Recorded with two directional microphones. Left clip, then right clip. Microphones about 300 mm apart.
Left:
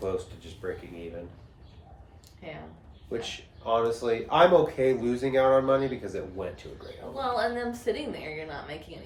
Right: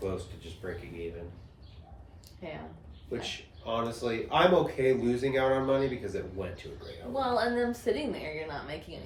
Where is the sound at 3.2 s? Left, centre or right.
Centre.